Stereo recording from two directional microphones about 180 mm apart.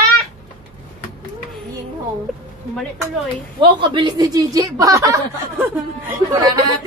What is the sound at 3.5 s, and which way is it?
A woman's voice, 25° right (ahead or behind).